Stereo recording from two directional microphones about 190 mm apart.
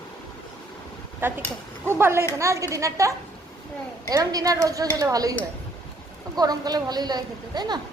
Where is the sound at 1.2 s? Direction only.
10° right (ahead or behind).